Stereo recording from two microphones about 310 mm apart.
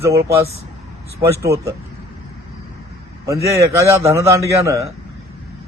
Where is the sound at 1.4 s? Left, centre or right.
Centre.